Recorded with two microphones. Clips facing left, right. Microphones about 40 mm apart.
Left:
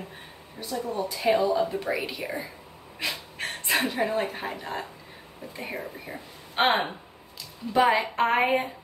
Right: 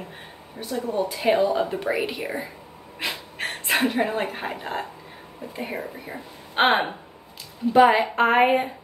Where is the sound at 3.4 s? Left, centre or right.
Centre.